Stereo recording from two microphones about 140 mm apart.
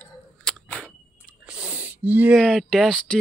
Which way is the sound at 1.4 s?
10° right (ahead or behind).